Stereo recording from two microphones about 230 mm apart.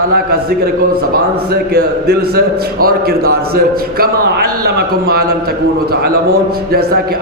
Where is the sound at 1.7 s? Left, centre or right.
Right.